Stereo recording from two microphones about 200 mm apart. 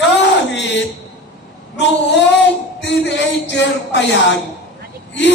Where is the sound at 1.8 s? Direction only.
60° left (ahead or behind).